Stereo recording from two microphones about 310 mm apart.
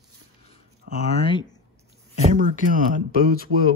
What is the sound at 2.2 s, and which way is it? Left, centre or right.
Speech, right.